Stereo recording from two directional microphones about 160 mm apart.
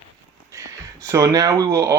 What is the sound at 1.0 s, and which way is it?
Speech, 20° right (ahead or behind).